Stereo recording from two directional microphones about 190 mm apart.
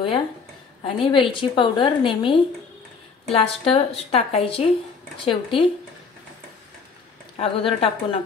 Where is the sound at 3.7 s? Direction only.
30° left (ahead or behind).